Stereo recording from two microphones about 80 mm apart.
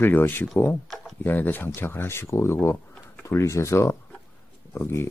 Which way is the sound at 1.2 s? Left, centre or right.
Left.